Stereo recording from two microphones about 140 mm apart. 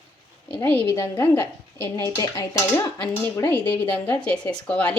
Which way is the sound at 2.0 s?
25° left (ahead or behind).